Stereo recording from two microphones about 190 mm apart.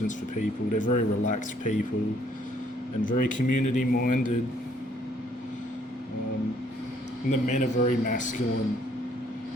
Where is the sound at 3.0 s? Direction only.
45° left (ahead or behind).